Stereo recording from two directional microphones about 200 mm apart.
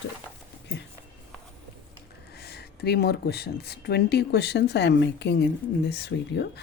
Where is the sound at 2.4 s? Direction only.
55° left (ahead or behind).